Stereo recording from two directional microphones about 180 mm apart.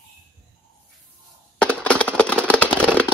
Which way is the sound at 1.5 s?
5° left (ahead or behind).